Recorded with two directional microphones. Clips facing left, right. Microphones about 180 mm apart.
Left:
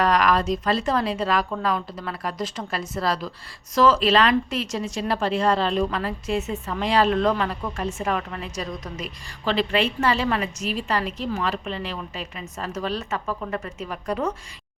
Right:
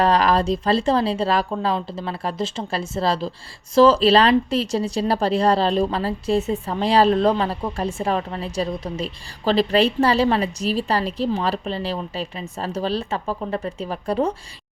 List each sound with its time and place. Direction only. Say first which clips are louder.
0.0 s speech: right 3 dB; 30° right (ahead or behind)